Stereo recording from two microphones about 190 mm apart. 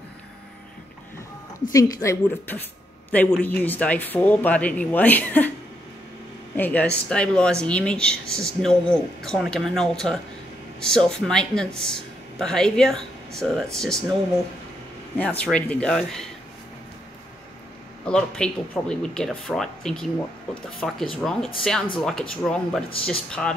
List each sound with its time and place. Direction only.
1.7 s speech: 15° left (ahead or behind)
6.5 s speech: 10° left (ahead or behind)
15.1 s speech: 5° left (ahead or behind)
18.0 s speech: 5° left (ahead or behind)